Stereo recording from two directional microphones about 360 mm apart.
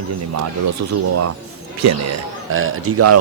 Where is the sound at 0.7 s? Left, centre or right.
Right.